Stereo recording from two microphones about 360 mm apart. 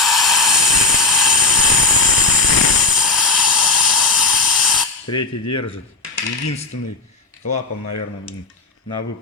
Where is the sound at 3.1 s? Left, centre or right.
Centre.